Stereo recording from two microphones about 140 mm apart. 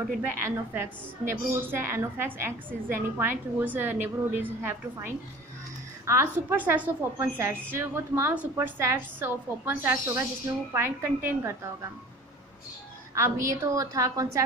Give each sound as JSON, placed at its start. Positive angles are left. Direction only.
{"t": 0.4, "sound": "a woman's voice", "side_deg": -15}
{"t": 13.1, "sound": "a woman's voice", "side_deg": -20}